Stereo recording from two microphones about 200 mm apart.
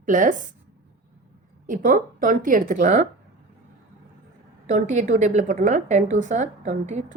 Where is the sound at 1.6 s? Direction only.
40° right (ahead or behind).